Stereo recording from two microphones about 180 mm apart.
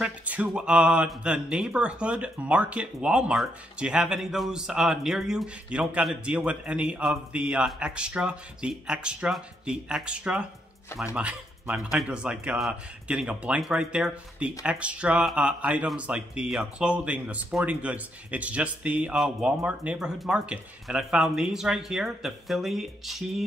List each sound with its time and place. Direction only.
0.0 s speech: 10° right (ahead or behind)